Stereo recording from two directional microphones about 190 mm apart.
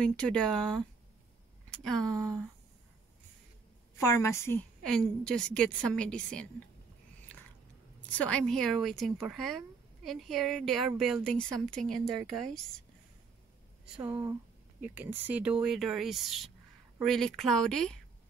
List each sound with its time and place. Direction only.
0.0 s speech: 5° left (ahead or behind)
4.0 s a woman's voice: 15° left (ahead or behind)
4.8 s speech: 5° left (ahead or behind)
8.0 s speech: 5° left (ahead or behind)
14.0 s speech: 20° right (ahead or behind)
14.8 s speech: 10° right (ahead or behind)